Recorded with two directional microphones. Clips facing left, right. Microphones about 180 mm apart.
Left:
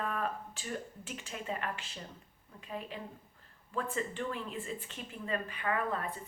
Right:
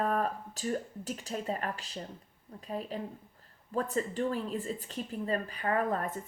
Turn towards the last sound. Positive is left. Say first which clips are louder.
# right 4 dB
turn(degrees=-45)  # may be behind; listen again after turning